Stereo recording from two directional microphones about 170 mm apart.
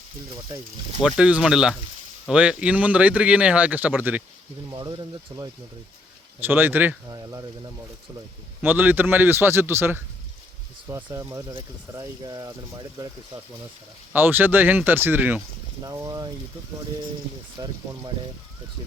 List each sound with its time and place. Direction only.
1.0 s speech: 5° right (ahead or behind)
4.7 s speech: 25° right (ahead or behind)
6.4 s speech: 10° right (ahead or behind)
8.6 s speech: 10° right (ahead or behind)
14.1 s speech: 10° right (ahead or behind)
17.6 s speech: 20° right (ahead or behind)